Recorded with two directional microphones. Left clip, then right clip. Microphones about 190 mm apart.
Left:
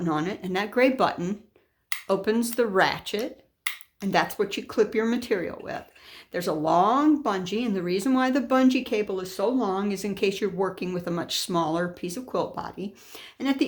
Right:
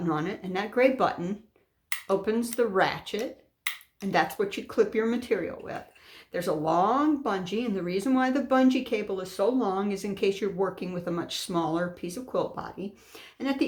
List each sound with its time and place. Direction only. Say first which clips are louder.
0.0 s speech: left 2 dB; 35° left (ahead or behind)